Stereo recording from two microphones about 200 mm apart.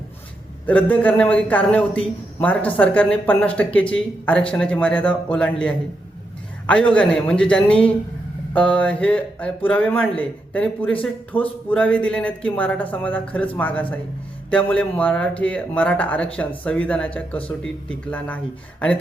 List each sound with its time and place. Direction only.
0.6 s a man's voice: 5° left (ahead or behind)